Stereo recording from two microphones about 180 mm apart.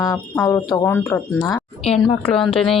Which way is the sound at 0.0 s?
15° left (ahead or behind).